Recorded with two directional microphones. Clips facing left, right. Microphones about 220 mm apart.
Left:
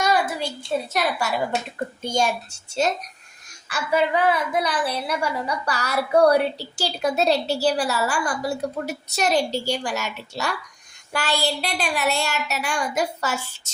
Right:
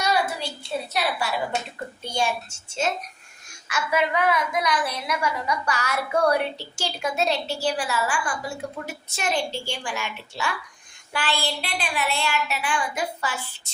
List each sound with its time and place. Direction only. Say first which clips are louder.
0.9 s a woman's voice: even; 45° left (ahead or behind)